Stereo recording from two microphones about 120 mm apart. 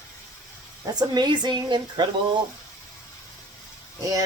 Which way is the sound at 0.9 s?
35° right (ahead or behind).